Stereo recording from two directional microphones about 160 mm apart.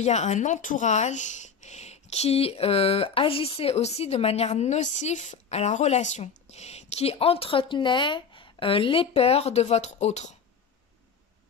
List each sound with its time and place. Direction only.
0.0 s a woman's voice: 45° left (ahead or behind)